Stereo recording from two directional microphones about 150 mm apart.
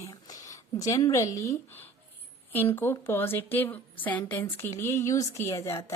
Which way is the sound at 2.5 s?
15° left (ahead or behind).